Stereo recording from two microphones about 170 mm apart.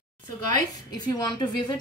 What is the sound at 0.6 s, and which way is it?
A woman's voice, 25° left (ahead or behind).